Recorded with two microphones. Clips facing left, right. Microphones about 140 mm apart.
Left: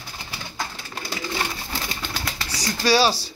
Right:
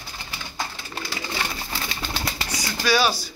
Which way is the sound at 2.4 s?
35° left (ahead or behind).